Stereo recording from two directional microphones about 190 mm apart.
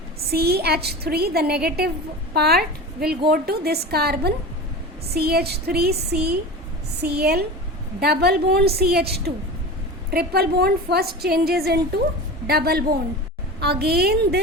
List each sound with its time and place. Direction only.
0.3 s a woman's voice: 55° right (ahead or behind)